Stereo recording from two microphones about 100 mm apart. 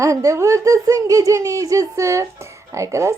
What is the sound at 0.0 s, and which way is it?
Speech, 35° right (ahead or behind).